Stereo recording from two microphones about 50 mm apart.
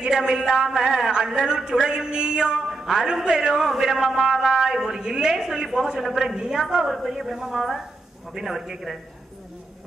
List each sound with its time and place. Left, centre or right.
0.0 s a man's voice: centre
6.3 s a woman's voice: centre